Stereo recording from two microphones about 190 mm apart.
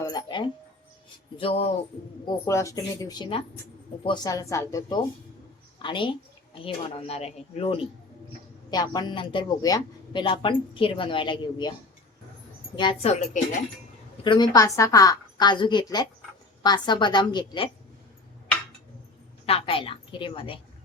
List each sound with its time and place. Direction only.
0.0 s a woman's voice: 20° left (ahead or behind)
2.2 s a woman's voice: 15° left (ahead or behind); by 7.9 s 30° left (ahead or behind)
8.7 s a woman's voice: 20° left (ahead or behind)
12.7 s a woman's voice: 25° left (ahead or behind)
14.3 s a woman's voice: 25° left (ahead or behind)
19.5 s a woman's voice: 30° left (ahead or behind)